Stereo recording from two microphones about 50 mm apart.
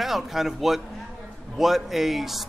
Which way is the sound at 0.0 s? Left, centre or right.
Centre.